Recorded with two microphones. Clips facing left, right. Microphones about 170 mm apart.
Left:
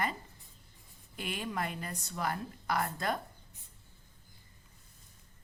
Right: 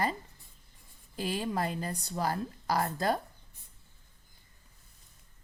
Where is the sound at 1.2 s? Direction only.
30° right (ahead or behind).